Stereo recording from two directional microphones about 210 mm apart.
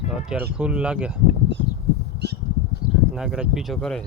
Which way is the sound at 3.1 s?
5° right (ahead or behind).